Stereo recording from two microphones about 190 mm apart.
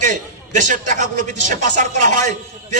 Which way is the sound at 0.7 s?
40° right (ahead or behind).